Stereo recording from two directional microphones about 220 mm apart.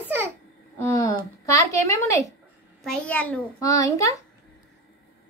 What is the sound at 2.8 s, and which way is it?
A child's voice, 5° left (ahead or behind).